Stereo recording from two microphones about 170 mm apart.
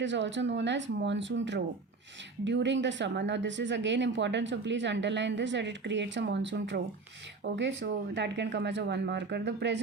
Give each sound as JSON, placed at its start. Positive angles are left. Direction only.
{"t": 0.0, "sound": "speech", "side_deg": -90}